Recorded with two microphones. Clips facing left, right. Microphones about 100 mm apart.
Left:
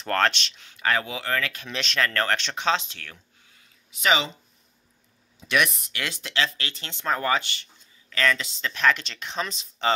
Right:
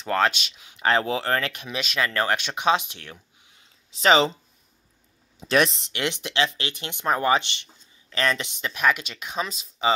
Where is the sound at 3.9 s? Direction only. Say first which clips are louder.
Right 5 dB; 35° right (ahead or behind).